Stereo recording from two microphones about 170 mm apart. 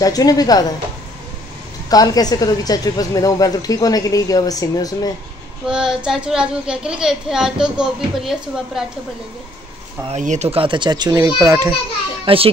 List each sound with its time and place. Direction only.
0.0 s a woman's voice: 20° left (ahead or behind)
1.9 s a woman's voice: 20° left (ahead or behind)
5.7 s speech: 5° right (ahead or behind)
10.1 s a child's voice: 45° right (ahead or behind); by 11.7 s 20° right (ahead or behind)
12.3 s a child's voice: 30° right (ahead or behind)